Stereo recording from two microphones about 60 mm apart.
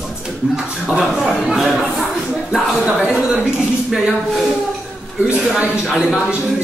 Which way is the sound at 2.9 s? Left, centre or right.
Centre.